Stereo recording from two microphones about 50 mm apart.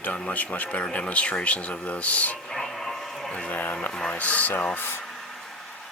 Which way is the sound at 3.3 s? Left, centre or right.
Left.